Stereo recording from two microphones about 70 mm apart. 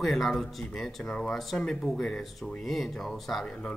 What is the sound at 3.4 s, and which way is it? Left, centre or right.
Speech, centre.